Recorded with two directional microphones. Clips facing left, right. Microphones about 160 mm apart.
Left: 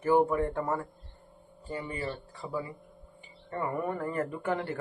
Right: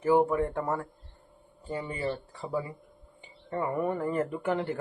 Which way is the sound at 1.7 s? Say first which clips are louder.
Right 3 dB; 25° right (ahead or behind).